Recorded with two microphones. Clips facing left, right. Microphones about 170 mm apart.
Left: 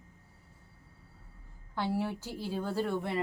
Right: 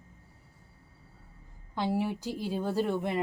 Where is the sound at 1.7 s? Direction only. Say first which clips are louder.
Right 3 dB; 15° right (ahead or behind).